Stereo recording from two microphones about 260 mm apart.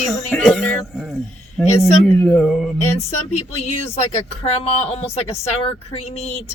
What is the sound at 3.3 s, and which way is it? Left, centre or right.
Speech, left.